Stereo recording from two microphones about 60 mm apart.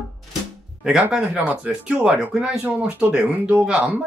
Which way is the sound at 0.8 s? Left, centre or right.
Centre.